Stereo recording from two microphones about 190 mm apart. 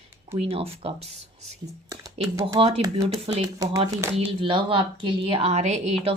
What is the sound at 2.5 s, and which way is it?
A woman's voice, 30° right (ahead or behind).